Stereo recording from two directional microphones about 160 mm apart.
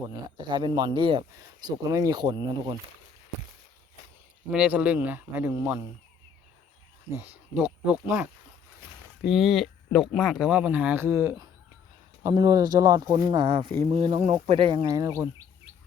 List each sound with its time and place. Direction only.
0.0 s speech: 25° right (ahead or behind)
4.5 s speech: 10° right (ahead or behind)
7.2 s speech: 10° right (ahead or behind)